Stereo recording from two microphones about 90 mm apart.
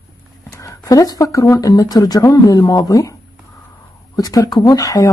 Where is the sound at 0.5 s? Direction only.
40° left (ahead or behind).